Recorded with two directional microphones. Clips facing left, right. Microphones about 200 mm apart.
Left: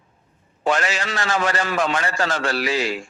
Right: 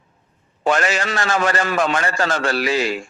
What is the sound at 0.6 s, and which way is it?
A man's voice, 50° right (ahead or behind).